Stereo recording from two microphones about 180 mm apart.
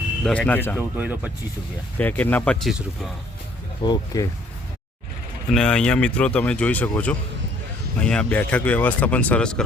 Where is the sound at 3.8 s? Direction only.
20° left (ahead or behind).